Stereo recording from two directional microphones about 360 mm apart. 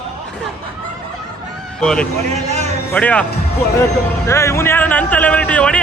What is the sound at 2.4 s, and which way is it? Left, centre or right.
Speech, centre.